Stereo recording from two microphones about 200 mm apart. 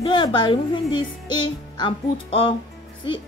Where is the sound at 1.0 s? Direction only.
25° left (ahead or behind).